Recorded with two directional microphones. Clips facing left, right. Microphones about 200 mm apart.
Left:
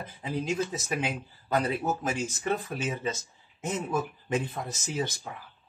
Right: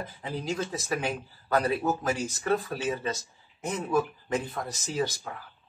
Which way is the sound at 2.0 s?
20° left (ahead or behind).